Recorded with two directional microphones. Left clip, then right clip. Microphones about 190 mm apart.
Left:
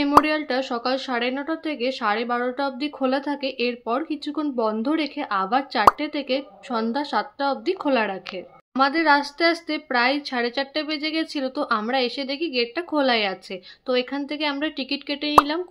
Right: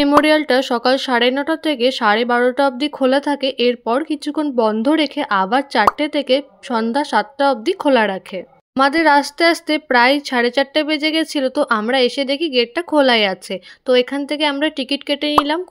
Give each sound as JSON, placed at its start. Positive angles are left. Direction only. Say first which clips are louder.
{"t": 0.2, "sound": "speech", "louder": "right 9 dB", "side_deg": -45}